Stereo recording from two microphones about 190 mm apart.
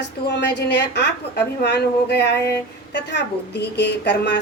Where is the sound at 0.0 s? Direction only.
65° left (ahead or behind).